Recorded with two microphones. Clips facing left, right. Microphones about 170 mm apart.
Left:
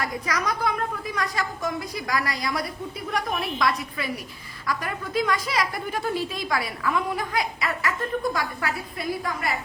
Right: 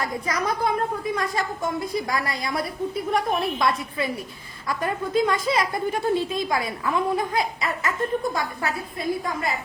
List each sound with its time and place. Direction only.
0.0 s a woman's voice: 25° right (ahead or behind)